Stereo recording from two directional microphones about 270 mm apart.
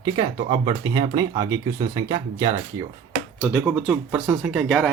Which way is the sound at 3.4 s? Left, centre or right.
Centre.